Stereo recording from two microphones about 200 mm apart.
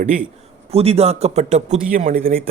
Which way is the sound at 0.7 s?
30° right (ahead or behind).